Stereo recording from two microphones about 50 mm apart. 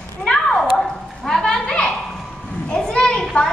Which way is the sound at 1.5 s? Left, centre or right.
Centre.